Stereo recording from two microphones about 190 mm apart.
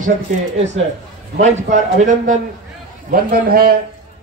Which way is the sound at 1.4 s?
40° right (ahead or behind).